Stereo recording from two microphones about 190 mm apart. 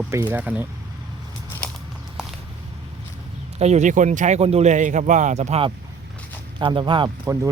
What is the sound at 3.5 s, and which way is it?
Speech, 35° right (ahead or behind).